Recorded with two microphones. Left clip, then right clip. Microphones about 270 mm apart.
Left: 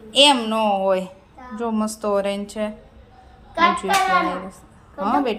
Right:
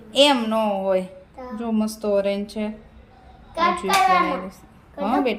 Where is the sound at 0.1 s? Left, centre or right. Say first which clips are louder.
Left 2 dB; centre.